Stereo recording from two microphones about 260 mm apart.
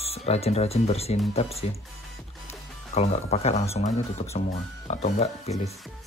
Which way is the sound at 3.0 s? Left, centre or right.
Left.